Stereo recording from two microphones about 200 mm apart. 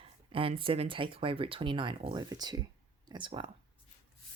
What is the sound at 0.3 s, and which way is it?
Speech, 25° right (ahead or behind).